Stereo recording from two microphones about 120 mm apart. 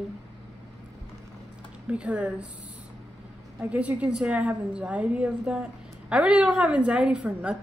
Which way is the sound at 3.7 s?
10° right (ahead or behind).